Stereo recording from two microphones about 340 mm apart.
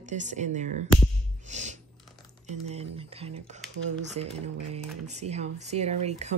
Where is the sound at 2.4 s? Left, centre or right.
Centre.